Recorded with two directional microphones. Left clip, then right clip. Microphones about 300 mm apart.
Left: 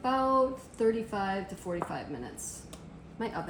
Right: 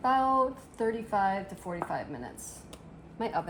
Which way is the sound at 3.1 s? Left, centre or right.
Centre.